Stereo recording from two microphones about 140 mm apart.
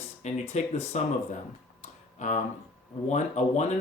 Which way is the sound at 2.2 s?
60° left (ahead or behind).